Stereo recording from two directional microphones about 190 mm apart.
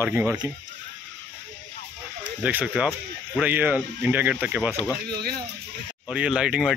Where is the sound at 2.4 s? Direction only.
10° right (ahead or behind).